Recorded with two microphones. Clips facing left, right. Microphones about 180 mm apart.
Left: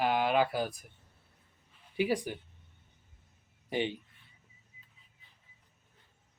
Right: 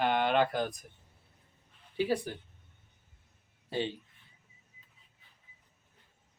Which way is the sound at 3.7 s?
15° left (ahead or behind).